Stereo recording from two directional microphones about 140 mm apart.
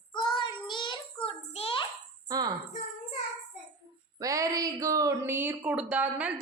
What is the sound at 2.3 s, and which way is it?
Speech, 30° right (ahead or behind).